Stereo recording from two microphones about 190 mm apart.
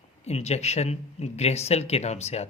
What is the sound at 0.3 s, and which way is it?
Speech, 35° left (ahead or behind).